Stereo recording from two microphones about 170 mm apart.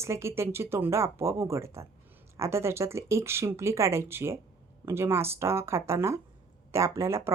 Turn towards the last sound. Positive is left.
turn(degrees=-15)  # may be behind; listen again after turning